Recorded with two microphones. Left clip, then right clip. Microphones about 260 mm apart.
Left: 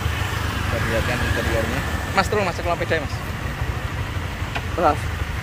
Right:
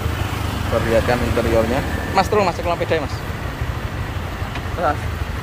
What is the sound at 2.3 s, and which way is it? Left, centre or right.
Speech, centre.